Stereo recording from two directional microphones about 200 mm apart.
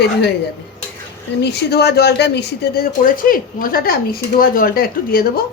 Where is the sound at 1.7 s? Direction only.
55° left (ahead or behind).